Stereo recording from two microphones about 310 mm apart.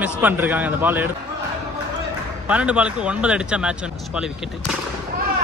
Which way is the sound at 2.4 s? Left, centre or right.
Centre.